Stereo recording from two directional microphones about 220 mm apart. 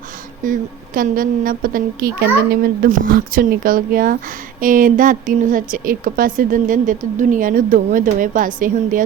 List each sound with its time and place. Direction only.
0.4 s a woman's voice: 40° right (ahead or behind)